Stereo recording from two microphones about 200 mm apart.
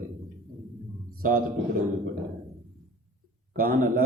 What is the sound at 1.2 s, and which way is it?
Speech, 45° right (ahead or behind).